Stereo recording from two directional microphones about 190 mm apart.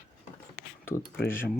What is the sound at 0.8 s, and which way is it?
Speech, 15° left (ahead or behind).